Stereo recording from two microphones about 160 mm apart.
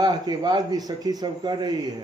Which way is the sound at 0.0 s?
25° right (ahead or behind).